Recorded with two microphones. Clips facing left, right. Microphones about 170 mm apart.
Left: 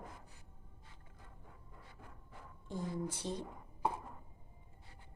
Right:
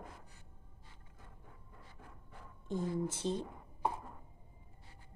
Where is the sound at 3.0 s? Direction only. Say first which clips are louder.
Right 4 dB; 25° right (ahead or behind).